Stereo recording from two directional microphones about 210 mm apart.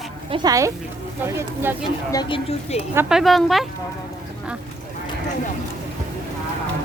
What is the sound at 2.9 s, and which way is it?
Speech, centre (ahead or behind).